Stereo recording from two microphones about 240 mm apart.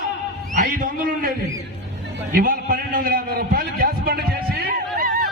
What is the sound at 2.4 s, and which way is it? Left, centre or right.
A man's voice, right.